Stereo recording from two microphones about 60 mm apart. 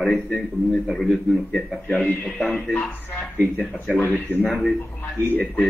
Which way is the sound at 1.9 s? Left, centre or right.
Left.